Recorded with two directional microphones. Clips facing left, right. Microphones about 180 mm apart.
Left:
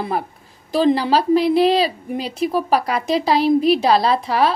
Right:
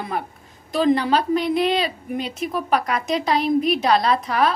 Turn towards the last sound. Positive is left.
turn(degrees=30)  # may be behind; listen again after turning